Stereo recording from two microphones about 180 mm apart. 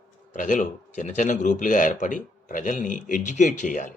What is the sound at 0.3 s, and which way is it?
Speech, 45° left (ahead or behind).